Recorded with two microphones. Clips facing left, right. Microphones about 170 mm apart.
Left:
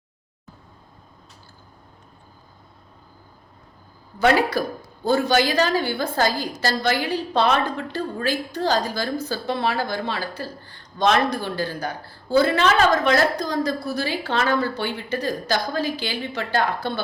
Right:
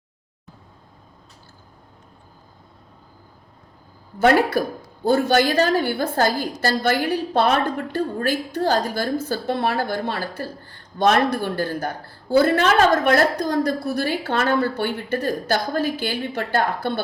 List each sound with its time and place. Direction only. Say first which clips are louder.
4.2 s a woman's voice: right 2 dB; 50° right (ahead or behind)